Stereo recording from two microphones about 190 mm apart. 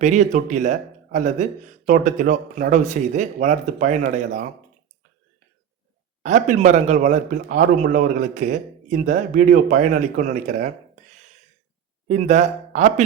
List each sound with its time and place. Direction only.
0.0 s speech: 40° right (ahead or behind)
6.2 s speech: 40° right (ahead or behind)
12.0 s speech: 40° right (ahead or behind)